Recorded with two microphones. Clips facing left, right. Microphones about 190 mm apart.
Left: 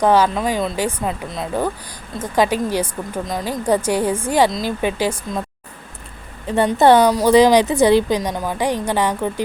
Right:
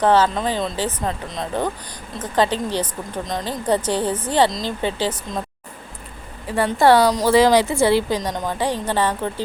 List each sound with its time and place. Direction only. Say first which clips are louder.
0.0 s a woman's voice: left 1 dB; 10° left (ahead or behind)
6.7 s a woman's voice: left 2 dB; 20° left (ahead or behind)